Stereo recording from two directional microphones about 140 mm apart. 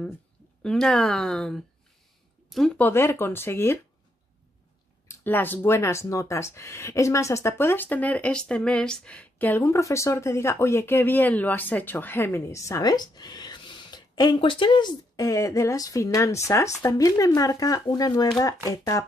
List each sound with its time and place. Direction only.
0.6 s speech: 5° left (ahead or behind)
2.9 s speech: 20° left (ahead or behind)
5.0 s speech: 15° left (ahead or behind)